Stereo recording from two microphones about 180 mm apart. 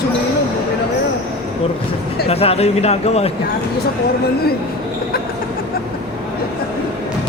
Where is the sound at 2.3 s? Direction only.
35° left (ahead or behind).